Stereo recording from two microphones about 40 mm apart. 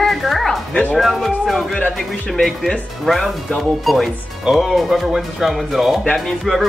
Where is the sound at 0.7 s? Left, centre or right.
Left.